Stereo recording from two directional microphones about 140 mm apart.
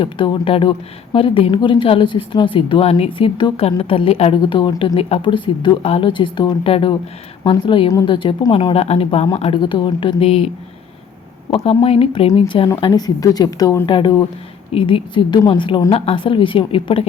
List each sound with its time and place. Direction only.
0.0 s speech: 40° left (ahead or behind)
8.7 s speech: 45° left (ahead or behind)
11.5 s speech: 40° left (ahead or behind)
12.8 s speech: 30° left (ahead or behind)